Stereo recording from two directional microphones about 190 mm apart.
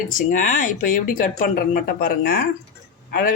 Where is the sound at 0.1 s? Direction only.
45° left (ahead or behind).